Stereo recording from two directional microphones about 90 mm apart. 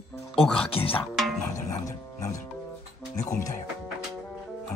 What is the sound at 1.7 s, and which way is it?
Music, 35° left (ahead or behind).